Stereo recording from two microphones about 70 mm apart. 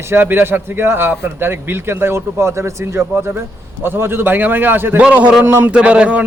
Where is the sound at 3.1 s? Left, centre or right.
Right.